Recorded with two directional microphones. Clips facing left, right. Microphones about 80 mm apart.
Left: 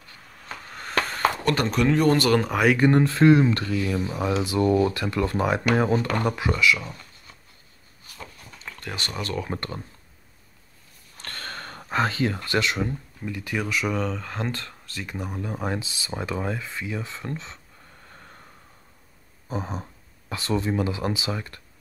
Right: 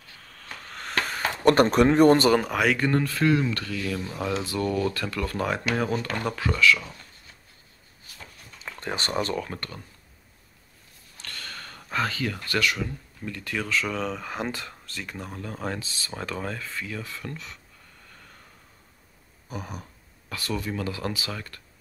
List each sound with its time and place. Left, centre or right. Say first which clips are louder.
0.2 s a sound: left 3 dB; centre
1.4 s speech: right 10 dB; right
2.3 s speech: left 2 dB; centre
2.8 s speech: left 6 dB; left
8.7 s speech: right 5 dB; right
9.5 s speech: left 5 dB; left
11.1 s a sound: left 4 dB; left
13.2 s speech: left 2 dB; centre
14.0 s speech: left 1 dB; centre
14.9 s speech: left 5 dB; centre; by 17.6 s left
19.5 s speech: left 6 dB; left